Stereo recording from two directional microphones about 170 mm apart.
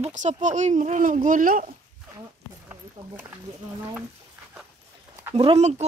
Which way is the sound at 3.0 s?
30° right (ahead or behind).